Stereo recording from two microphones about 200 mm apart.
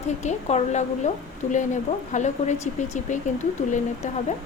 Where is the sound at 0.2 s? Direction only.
35° left (ahead or behind).